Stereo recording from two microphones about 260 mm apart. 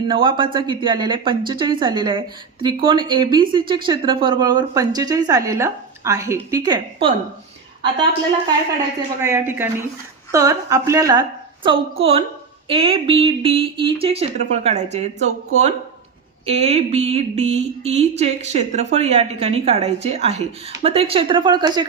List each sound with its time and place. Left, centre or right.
0.1 s speech: centre
9.2 s a woman's voice: centre